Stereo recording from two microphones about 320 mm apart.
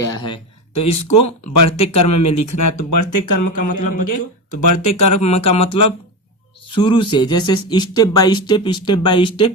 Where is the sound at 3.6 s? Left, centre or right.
Left.